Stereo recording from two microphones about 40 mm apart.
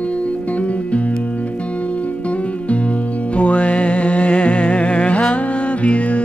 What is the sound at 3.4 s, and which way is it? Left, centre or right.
Music, left.